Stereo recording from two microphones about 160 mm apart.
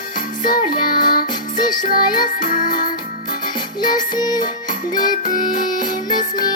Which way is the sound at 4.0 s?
25° left (ahead or behind).